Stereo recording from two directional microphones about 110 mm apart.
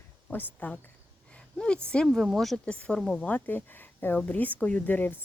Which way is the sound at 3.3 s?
15° left (ahead or behind).